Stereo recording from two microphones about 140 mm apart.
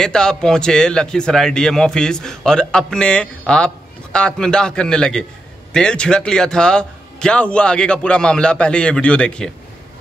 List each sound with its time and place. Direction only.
0.0 s a man's voice: 5° left (ahead or behind)